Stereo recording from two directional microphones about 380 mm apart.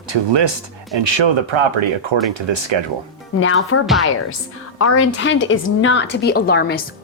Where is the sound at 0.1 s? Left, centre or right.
Right.